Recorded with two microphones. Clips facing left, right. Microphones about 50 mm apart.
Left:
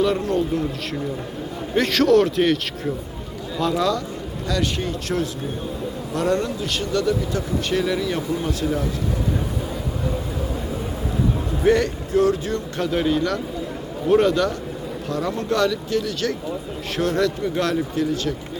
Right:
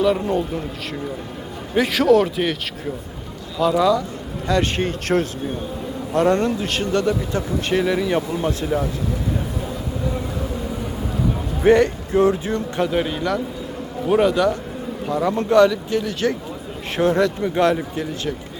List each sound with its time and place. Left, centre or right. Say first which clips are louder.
1.7 s a man's voice: right 1 dB; centre
3.6 s a man's voice: right 4 dB; centre
4.4 s a man's voice: right 4 dB; right
11.6 s a man's voice: right 4 dB; right; by 14.5 s centre
15.0 s speech: right 5 dB; right